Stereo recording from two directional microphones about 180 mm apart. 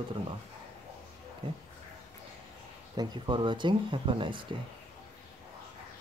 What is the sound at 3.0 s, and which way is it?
Speech, 25° right (ahead or behind).